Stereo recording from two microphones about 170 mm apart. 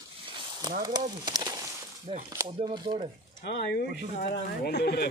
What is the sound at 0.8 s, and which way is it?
Speech, 25° right (ahead or behind).